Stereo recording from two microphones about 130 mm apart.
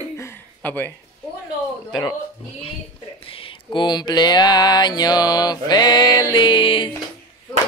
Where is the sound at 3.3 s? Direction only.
45° left (ahead or behind).